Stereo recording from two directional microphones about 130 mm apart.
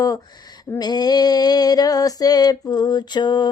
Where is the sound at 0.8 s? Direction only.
30° left (ahead or behind).